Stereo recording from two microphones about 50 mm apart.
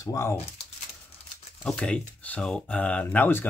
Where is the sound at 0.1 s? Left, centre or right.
Left.